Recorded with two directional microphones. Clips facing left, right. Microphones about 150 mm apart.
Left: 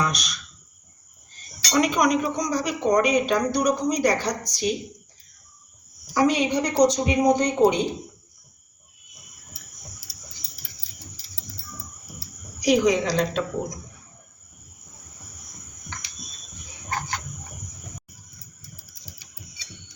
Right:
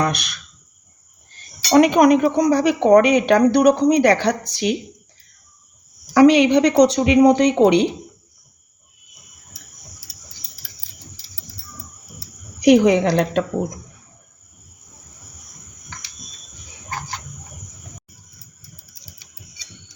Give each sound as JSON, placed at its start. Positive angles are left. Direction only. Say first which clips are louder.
{"t": 0.0, "sound": "speech", "louder": "right 5 dB", "side_deg": -60}
{"t": 1.7, "sound": "speech", "louder": "right 8 dB", "side_deg": -60}
{"t": 6.1, "sound": "speech", "louder": "right 9 dB", "side_deg": -80}
{"t": 12.5, "sound": "speech", "louder": "right 7 dB", "side_deg": -60}